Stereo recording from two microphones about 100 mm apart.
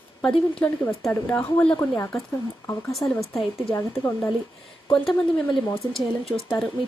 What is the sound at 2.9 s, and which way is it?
Speech, centre (ahead or behind).